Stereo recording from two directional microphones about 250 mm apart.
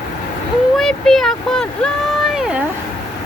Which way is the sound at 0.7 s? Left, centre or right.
Centre.